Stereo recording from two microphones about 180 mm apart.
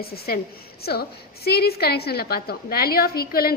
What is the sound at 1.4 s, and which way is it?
A woman's voice, 60° left (ahead or behind).